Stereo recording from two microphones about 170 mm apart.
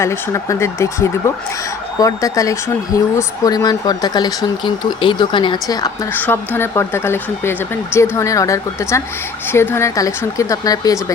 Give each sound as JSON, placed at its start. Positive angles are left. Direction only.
{"t": 0.0, "sound": "speech", "side_deg": 15}
{"t": 6.1, "sound": "speech", "side_deg": 10}